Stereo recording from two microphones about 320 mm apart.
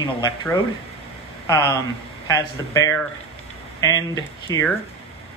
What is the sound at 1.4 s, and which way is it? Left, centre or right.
Speech, centre.